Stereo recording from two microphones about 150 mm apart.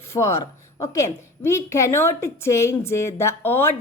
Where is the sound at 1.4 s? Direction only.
20° left (ahead or behind).